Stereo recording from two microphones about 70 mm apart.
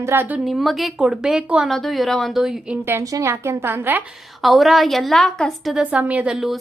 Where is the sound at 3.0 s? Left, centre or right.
Right.